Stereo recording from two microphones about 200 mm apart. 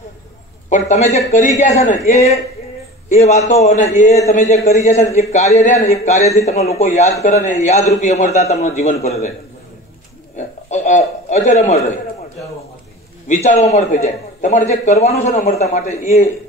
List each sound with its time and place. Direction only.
0.7 s a man's voice: 35° left (ahead or behind)
10.3 s a sound: 35° left (ahead or behind)
13.3 s a man's voice: 35° left (ahead or behind)